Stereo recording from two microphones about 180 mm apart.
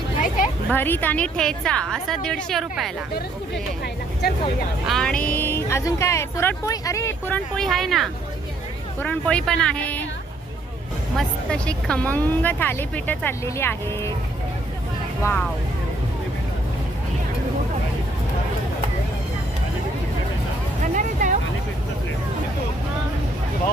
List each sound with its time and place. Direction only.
0.7 s a woman's voice: 10° left (ahead or behind)
4.9 s a woman's voice: 5° left (ahead or behind)
11.2 s speech: 5° left (ahead or behind)
15.2 s speech: 10° left (ahead or behind)
20.8 s a sound: 45° right (ahead or behind)